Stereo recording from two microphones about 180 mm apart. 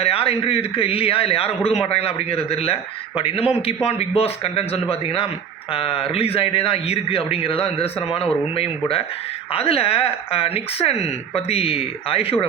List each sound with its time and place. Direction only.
0.0 s speech: 30° left (ahead or behind)